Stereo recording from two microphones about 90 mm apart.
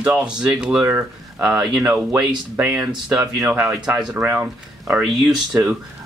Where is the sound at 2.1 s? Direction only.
20° right (ahead or behind).